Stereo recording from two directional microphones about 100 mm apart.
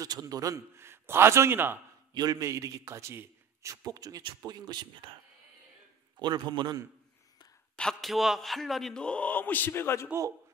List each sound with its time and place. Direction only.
0.0 s a man's voice: 35° right (ahead or behind); by 1.8 s 20° right (ahead or behind)
2.1 s a man's voice: 40° right (ahead or behind)
6.1 s a man's voice: 45° right (ahead or behind)
7.7 s speech: 5° left (ahead or behind); by 10.0 s 25° left (ahead or behind)